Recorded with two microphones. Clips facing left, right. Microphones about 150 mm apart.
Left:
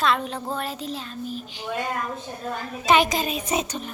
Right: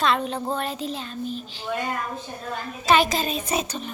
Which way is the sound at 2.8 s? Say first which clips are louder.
Even; 15° left (ahead or behind).